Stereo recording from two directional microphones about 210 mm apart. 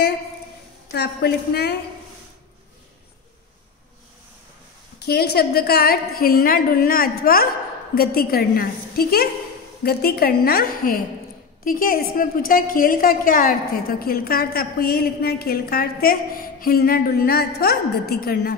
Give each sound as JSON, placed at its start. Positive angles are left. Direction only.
{"t": 0.9, "sound": "a woman's voice", "side_deg": 50}
{"t": 4.9, "sound": "a woman's voice", "side_deg": 50}